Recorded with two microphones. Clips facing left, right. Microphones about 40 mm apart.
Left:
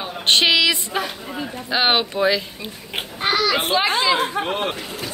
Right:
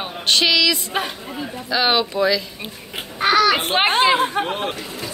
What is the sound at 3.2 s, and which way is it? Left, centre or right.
A child's voice, right.